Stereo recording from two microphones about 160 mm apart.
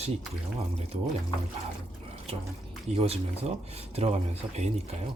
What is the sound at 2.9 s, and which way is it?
Speech, 40° right (ahead or behind).